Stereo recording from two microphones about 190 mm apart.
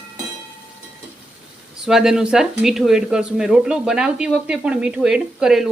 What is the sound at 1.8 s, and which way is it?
Speech, 5° right (ahead or behind).